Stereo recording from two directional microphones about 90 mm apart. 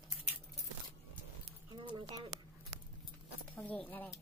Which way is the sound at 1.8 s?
60° right (ahead or behind).